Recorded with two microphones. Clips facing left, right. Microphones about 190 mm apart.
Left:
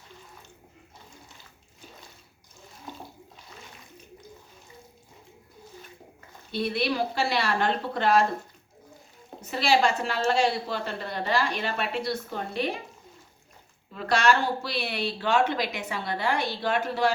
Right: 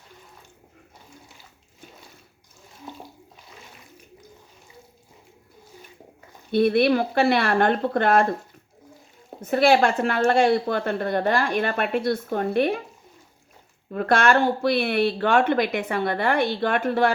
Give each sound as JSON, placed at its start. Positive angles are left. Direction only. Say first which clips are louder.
{"t": 6.5, "sound": "speech", "louder": "right 9 dB", "side_deg": -55}
{"t": 9.4, "sound": "a woman's voice", "louder": "right 6 dB", "side_deg": -55}
{"t": 13.9, "sound": "speech", "louder": "right 4 dB", "side_deg": -55}